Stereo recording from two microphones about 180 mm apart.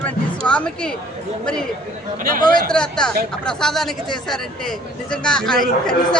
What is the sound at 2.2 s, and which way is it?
Speech, 50° right (ahead or behind).